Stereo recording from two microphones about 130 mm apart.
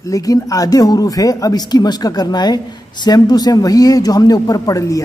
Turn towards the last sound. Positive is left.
turn(degrees=25)  # may be behind; listen again after turning